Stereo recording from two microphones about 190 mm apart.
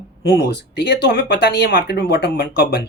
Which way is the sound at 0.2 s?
60° left (ahead or behind).